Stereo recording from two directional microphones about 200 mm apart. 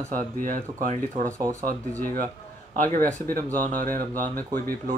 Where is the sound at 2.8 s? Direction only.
45° right (ahead or behind).